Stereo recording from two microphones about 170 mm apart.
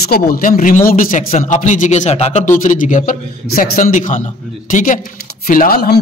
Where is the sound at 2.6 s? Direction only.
50° left (ahead or behind).